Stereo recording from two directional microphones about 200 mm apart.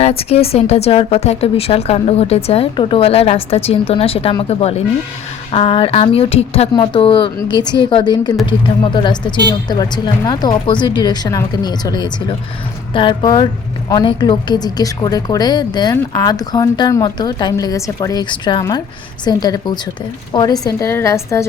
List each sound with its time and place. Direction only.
0.0 s a woman's voice: 30° left (ahead or behind); by 21.4 s 15° left (ahead or behind)